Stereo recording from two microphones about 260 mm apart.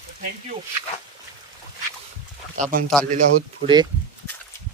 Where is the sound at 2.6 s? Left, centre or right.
Right.